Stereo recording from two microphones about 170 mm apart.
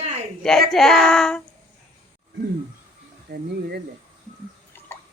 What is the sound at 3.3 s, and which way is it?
Speech, 65° right (ahead or behind).